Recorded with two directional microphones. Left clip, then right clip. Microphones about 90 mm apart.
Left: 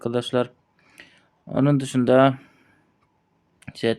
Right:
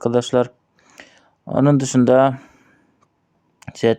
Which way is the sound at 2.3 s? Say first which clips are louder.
Right 2 dB; 35° right (ahead or behind).